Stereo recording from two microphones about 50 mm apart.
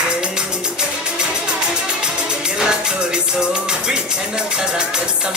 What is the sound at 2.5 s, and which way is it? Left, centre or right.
Music, centre.